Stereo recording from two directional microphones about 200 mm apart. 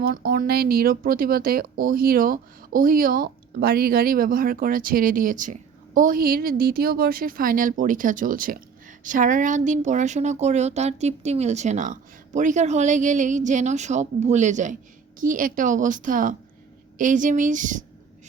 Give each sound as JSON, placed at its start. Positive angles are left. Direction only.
{"t": 0.0, "sound": "speech", "side_deg": -50}